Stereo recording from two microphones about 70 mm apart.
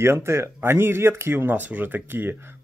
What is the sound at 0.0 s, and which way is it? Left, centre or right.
Speech, right.